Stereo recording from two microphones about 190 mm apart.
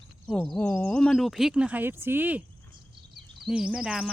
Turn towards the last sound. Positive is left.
turn(degrees=-5)  # may be behind; listen again after turning